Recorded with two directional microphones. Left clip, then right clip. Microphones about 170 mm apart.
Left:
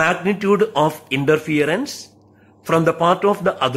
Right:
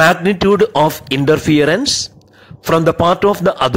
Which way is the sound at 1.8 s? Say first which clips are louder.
Right 11 dB; 30° right (ahead or behind).